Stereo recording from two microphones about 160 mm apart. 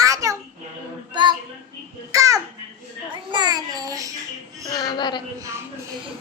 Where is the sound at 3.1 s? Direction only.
30° right (ahead or behind).